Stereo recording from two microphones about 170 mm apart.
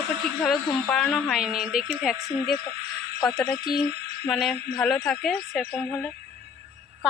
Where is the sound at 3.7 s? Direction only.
35° right (ahead or behind).